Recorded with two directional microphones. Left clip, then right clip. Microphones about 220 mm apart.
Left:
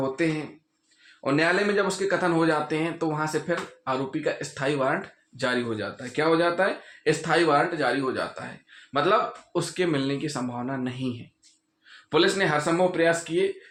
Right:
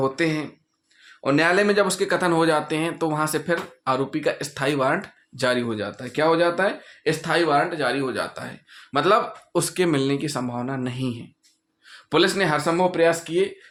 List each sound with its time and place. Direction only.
0.0 s speech: 35° right (ahead or behind)
8.9 s speech: 50° right (ahead or behind)